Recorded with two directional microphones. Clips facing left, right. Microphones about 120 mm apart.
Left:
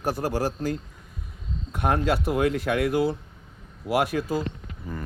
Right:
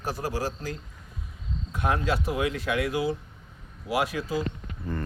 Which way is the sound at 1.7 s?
55° left (ahead or behind).